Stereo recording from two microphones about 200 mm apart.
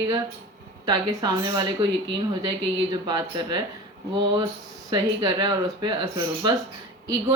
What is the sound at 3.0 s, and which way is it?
Speech, 20° right (ahead or behind).